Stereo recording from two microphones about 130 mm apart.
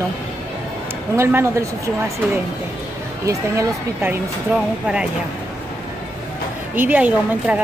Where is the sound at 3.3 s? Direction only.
25° right (ahead or behind).